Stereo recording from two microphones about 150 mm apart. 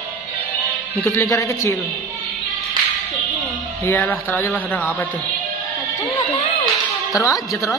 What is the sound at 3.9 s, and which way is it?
Speech, 15° left (ahead or behind).